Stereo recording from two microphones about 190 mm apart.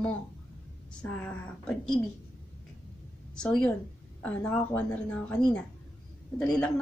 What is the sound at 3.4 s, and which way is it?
Speech, 5° left (ahead or behind).